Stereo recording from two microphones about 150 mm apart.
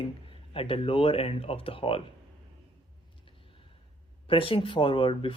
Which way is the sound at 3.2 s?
35° left (ahead or behind).